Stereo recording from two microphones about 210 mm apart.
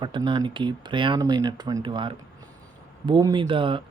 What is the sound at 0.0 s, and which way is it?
Speech, 20° right (ahead or behind).